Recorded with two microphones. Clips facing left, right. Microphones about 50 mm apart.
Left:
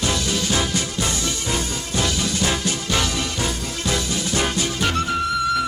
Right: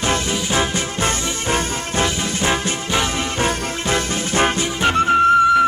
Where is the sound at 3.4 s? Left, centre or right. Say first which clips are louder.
Right 5 dB; right.